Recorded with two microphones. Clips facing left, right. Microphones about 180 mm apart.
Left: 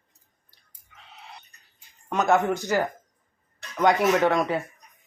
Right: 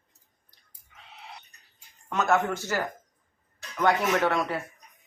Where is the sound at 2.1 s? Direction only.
15° left (ahead or behind).